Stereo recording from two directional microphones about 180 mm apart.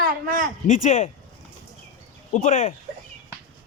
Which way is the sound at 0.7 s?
45° left (ahead or behind).